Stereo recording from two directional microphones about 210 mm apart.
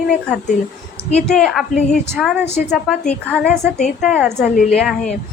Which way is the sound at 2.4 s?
55° left (ahead or behind).